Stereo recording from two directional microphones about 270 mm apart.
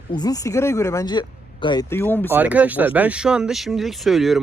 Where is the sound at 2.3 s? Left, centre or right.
Centre.